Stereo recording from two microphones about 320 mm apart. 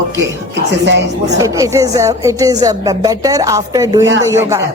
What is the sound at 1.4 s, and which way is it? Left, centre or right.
Speech, centre.